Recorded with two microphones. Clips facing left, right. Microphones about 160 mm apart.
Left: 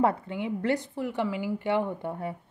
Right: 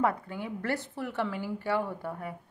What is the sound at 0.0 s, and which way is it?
A woman's voice, 25° left (ahead or behind).